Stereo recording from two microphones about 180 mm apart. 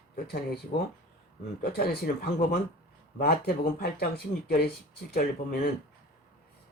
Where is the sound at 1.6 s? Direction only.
60° left (ahead or behind).